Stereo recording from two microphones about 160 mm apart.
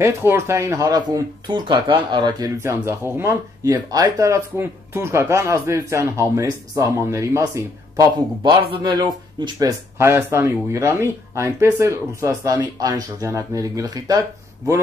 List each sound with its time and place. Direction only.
0.0 s speech: 15° right (ahead or behind)